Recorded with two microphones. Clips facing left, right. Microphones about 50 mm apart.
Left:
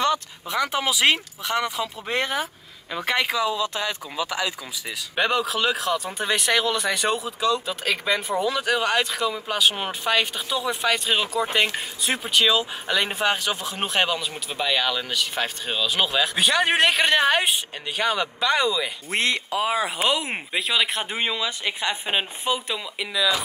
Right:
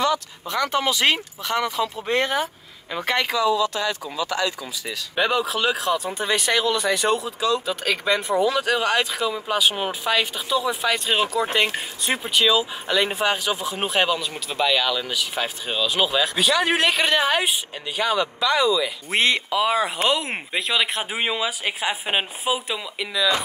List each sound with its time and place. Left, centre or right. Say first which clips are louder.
0.5 s speech: right 2 dB; centre
3.3 s speech: right 4 dB; left
4.3 s speech: right 3 dB; centre
5.2 s speech: right 1 dB; centre